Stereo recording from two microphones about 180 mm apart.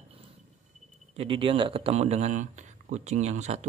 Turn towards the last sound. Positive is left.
turn(degrees=-40)  # may be behind; listen again after turning